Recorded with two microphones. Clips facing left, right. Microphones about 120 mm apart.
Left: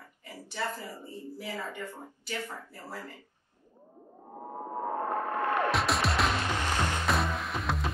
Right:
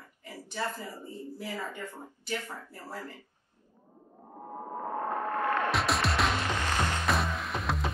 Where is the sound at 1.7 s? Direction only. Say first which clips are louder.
Left 1 dB; 15° left (ahead or behind).